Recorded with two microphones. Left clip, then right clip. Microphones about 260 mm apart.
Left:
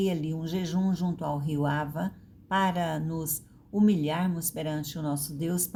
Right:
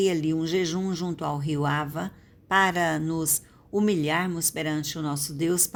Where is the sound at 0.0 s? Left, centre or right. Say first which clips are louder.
Right 7 dB; right.